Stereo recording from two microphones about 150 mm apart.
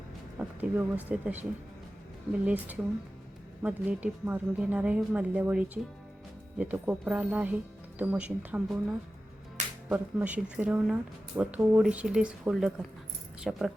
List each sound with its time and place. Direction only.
0.3 s speech: 10° right (ahead or behind)
9.6 s music: 55° right (ahead or behind)
9.9 s speech: 10° right (ahead or behind)